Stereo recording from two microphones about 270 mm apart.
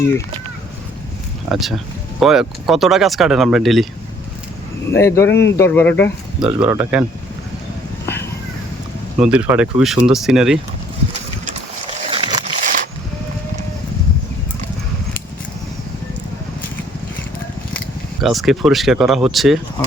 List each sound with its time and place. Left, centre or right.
1.5 s speech: centre
4.9 s speech: centre
6.4 s speech: centre
8.0 s a sound: centre
9.1 s speech: centre
12.0 s a sound: right
18.2 s speech: centre